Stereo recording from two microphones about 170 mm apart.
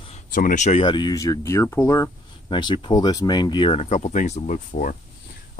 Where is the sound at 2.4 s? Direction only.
30° left (ahead or behind).